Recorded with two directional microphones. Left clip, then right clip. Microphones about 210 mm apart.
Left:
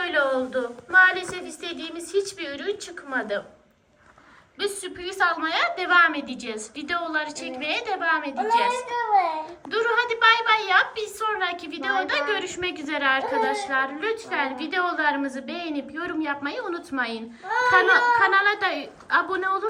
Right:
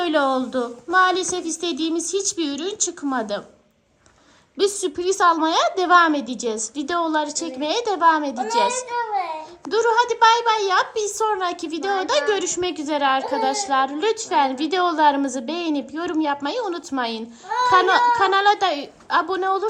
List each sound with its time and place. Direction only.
0.0 s a sound: 20° right (ahead or behind)
0.9 s a woman's voice: 20° right (ahead or behind)
4.5 s a woman's voice: 20° right (ahead or behind)
8.9 s a child's voice: 5° right (ahead or behind)
9.6 s a woman's voice: 15° right (ahead or behind)